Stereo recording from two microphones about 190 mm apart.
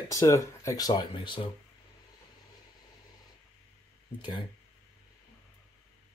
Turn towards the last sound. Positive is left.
turn(degrees=25)  # may be behind; listen again after turning